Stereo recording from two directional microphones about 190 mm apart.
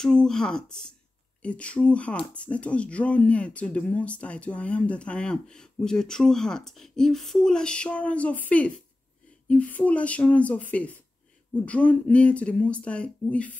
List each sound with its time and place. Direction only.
0.0 s speech: 5° left (ahead or behind)